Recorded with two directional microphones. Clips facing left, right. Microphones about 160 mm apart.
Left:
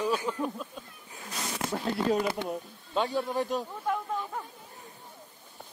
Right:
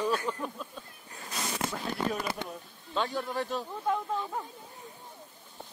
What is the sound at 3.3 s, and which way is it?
Speech, 15° left (ahead or behind).